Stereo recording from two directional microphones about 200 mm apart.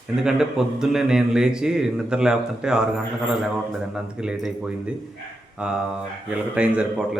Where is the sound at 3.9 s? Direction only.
5° right (ahead or behind).